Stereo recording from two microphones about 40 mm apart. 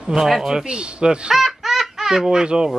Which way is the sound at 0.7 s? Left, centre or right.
Right.